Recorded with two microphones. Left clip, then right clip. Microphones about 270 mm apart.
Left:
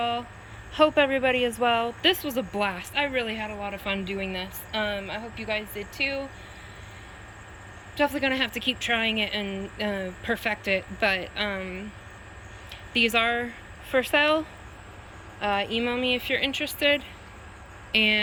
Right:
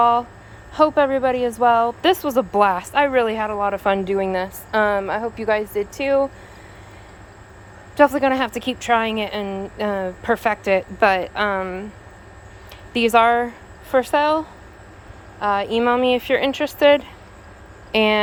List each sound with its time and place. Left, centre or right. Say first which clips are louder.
0.0 s speech: right 12 dB; centre
7.9 s speech: right 9 dB; centre
12.9 s speech: right 8 dB; centre